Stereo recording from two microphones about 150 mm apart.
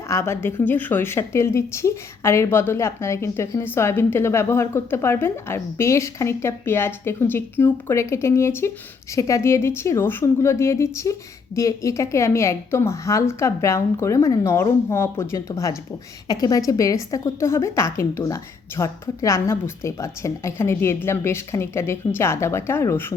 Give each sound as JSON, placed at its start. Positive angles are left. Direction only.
{"t": 0.1, "sound": "a woman's voice", "side_deg": 15}